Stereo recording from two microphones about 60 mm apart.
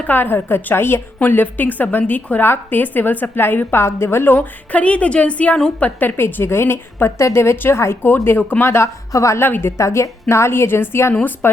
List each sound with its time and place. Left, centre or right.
0.0 s a woman's voice: left
9.1 s a woman's voice: left
9.4 s a woman's voice: left
9.7 s a woman's voice: left
11.2 s a woman's voice: left